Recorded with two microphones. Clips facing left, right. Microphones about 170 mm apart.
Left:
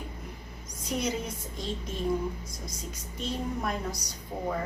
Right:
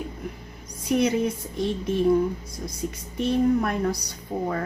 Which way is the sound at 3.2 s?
60° right (ahead or behind).